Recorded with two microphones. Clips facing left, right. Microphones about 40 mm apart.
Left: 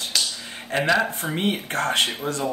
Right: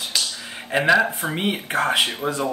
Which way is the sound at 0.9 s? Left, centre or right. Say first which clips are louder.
Right 3 dB; centre.